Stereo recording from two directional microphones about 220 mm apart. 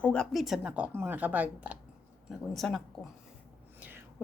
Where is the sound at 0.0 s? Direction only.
5° left (ahead or behind).